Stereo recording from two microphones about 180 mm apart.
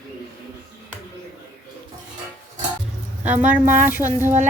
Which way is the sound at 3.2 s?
10° right (ahead or behind).